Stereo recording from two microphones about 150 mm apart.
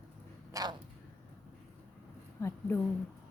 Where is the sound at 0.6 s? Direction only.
25° right (ahead or behind).